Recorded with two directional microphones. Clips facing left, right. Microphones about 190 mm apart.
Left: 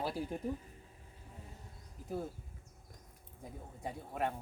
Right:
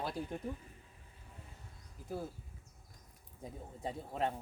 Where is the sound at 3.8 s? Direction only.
25° right (ahead or behind).